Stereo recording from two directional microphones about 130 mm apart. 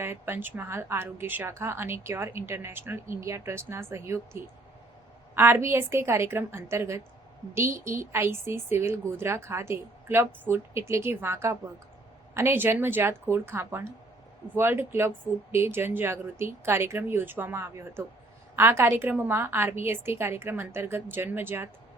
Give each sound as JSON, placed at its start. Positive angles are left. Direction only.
{"t": 0.0, "sound": "speech", "side_deg": -15}